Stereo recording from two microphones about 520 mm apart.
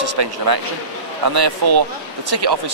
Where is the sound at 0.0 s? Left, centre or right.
Right.